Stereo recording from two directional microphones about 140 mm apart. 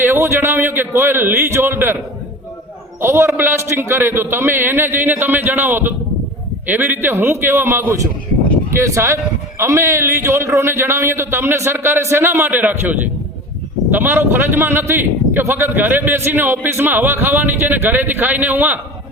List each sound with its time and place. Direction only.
0.0 s speech: 20° right (ahead or behind)
3.0 s a man's voice: 20° right (ahead or behind)